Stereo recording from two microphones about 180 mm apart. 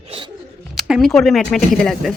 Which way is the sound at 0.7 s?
Centre (ahead or behind).